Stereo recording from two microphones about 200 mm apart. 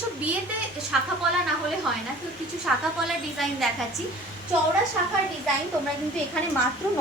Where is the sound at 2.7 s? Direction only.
Centre (ahead or behind).